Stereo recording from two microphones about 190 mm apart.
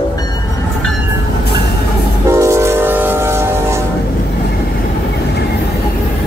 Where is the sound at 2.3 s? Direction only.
15° right (ahead or behind).